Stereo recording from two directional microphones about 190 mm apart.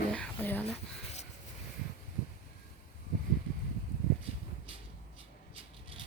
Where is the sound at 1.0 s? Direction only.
35° left (ahead or behind).